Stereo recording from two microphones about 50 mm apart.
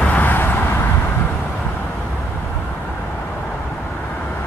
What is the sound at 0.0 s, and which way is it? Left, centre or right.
Vehicle, left.